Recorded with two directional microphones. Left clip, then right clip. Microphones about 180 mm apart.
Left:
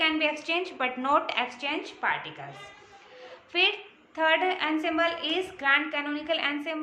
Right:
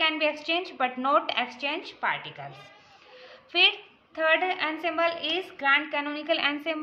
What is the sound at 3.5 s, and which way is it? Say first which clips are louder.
A woman's voice: right 3 dB; 30° right (ahead or behind).